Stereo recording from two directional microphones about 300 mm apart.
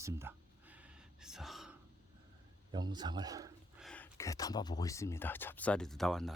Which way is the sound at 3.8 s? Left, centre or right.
Centre.